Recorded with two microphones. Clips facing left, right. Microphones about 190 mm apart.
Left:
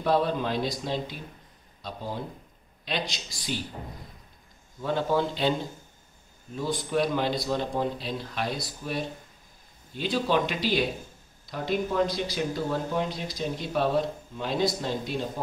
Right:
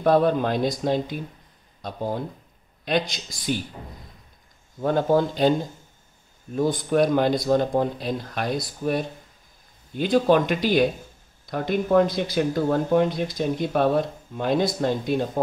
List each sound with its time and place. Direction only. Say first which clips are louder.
0.0 s speech: right 6 dB; 50° right (ahead or behind)
4.7 s speech: right 6 dB; 45° right (ahead or behind)
6.5 s speech: right 6 dB; 50° right (ahead or behind)